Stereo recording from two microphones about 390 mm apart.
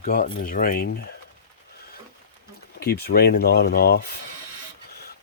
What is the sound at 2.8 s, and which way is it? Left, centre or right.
Speech, left.